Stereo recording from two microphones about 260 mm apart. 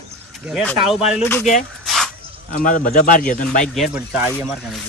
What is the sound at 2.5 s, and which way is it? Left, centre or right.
A man's voice, left.